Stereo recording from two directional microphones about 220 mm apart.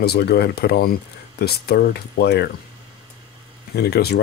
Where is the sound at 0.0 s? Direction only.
45° left (ahead or behind).